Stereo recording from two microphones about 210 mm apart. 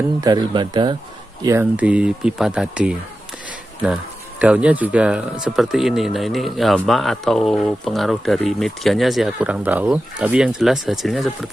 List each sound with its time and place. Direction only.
0.2 s speech: 20° right (ahead or behind)
1.4 s speech: 10° right (ahead or behind)